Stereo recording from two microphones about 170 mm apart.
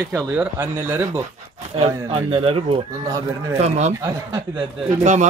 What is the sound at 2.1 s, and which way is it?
Speech, 30° right (ahead or behind).